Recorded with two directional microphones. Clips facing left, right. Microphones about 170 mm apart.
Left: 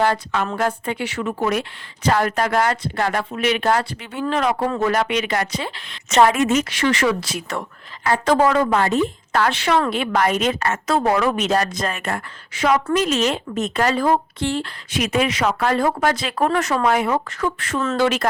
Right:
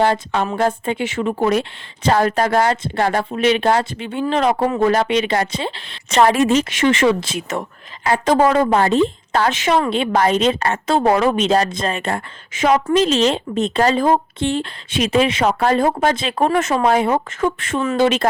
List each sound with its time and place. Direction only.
0.0 s a woman's voice: 30° right (ahead or behind)